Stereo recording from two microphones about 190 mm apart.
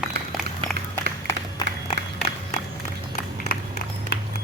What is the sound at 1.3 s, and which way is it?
Applause, 20° left (ahead or behind).